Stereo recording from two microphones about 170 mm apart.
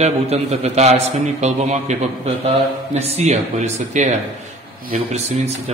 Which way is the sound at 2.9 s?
40° right (ahead or behind).